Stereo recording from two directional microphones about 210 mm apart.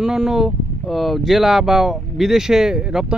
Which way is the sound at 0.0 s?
Centre (ahead or behind).